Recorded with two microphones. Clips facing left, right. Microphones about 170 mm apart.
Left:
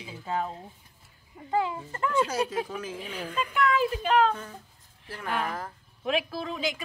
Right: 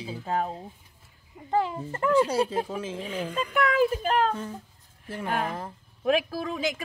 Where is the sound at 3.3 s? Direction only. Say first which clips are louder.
Right 1 dB; 50° right (ahead or behind).